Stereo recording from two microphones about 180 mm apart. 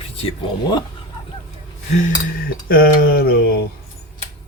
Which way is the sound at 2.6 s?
55° left (ahead or behind).